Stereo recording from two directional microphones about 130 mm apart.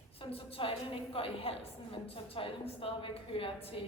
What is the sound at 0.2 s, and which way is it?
A woman's voice, 45° left (ahead or behind).